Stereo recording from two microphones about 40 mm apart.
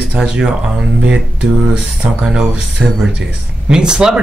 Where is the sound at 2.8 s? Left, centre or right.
Right.